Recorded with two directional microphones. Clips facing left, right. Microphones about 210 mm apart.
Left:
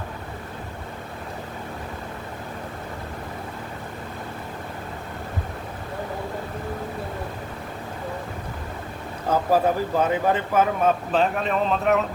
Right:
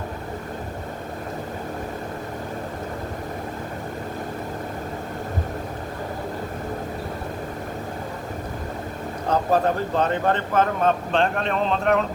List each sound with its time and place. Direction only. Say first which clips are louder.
9.3 s speech: even; 5° left (ahead or behind)